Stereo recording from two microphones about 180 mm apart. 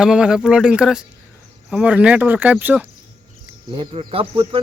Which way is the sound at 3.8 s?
30° right (ahead or behind).